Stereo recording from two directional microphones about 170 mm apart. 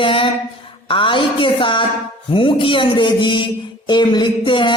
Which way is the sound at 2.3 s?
30° left (ahead or behind).